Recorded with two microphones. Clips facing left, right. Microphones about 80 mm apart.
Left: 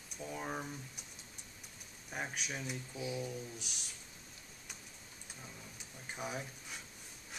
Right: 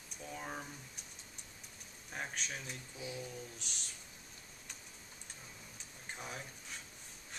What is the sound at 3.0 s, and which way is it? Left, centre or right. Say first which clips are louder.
Speech: left 4 dB; left.